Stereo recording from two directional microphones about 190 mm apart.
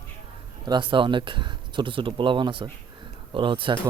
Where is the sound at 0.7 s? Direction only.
25° right (ahead or behind).